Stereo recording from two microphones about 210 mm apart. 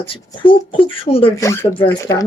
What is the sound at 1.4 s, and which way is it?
Speech, 15° left (ahead or behind).